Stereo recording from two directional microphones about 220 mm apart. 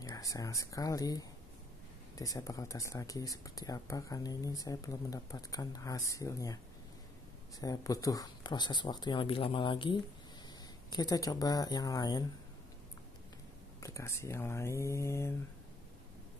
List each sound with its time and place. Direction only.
0.0 s speech: 15° left (ahead or behind)
7.6 s speech: 15° left (ahead or behind)
13.7 s speech: 15° left (ahead or behind)